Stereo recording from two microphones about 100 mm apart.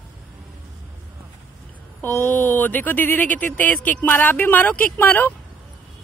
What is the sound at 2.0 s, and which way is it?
Speech, 25° left (ahead or behind).